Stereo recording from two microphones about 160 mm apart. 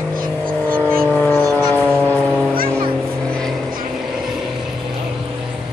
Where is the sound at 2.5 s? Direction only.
65° right (ahead or behind).